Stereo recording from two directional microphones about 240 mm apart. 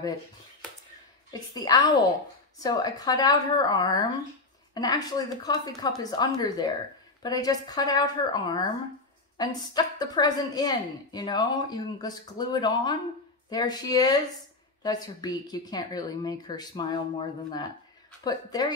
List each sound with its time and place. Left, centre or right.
1.5 s a woman's voice: centre